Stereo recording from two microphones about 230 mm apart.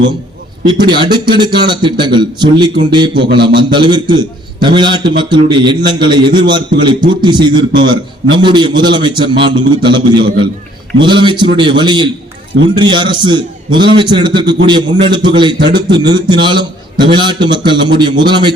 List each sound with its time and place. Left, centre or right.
0.6 s a man's voice: centre